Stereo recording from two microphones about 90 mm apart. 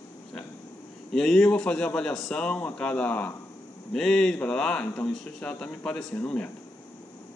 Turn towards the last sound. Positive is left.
turn(degrees=15)  # may be behind; listen again after turning